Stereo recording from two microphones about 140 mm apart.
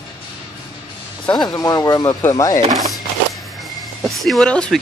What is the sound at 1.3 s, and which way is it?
Speech, 30° left (ahead or behind).